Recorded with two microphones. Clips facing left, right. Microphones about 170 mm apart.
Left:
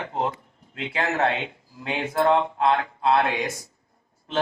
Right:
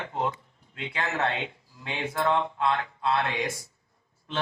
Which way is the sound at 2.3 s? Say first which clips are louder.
Left 5 dB; 55° left (ahead or behind).